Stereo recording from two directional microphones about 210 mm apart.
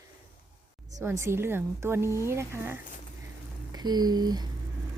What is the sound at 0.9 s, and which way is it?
Speech, 15° right (ahead or behind).